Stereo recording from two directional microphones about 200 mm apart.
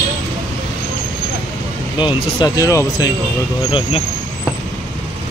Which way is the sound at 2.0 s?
20° left (ahead or behind).